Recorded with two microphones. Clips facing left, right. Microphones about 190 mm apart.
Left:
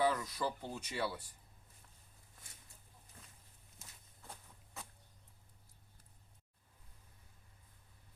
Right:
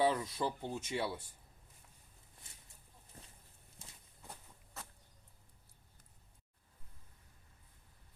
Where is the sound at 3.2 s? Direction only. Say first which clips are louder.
Right 4 dB; 30° right (ahead or behind).